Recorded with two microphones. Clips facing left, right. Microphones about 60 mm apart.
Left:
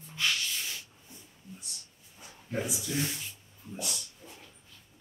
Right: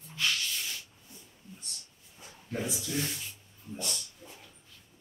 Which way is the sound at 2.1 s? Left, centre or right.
Centre.